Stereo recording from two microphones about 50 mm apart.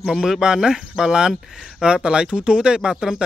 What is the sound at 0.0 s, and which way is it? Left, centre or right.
Speech, centre.